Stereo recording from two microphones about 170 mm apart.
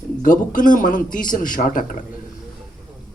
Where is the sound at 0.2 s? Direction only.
50° left (ahead or behind).